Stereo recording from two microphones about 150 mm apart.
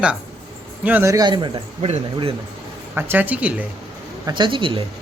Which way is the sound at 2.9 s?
10° right (ahead or behind).